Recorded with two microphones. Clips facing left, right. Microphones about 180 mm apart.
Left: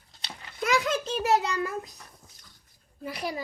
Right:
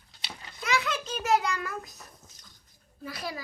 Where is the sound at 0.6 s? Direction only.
45° left (ahead or behind); by 1.9 s 25° left (ahead or behind).